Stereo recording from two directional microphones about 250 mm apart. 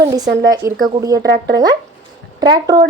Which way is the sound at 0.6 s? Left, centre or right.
Centre.